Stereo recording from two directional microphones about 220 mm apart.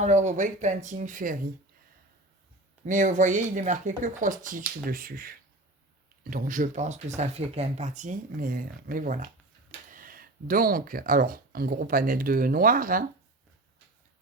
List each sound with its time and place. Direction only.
0.0 s speech: 30° right (ahead or behind)
2.8 s speech: 35° right (ahead or behind)